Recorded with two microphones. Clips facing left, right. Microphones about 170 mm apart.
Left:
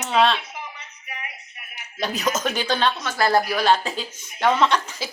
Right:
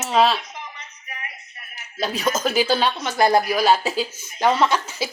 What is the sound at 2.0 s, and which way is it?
A woman's voice, centre (ahead or behind).